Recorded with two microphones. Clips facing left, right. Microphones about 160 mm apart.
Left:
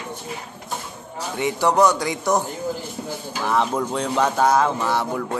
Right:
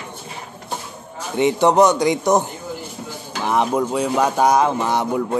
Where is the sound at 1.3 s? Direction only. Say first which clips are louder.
Right 5 dB; 20° right (ahead or behind).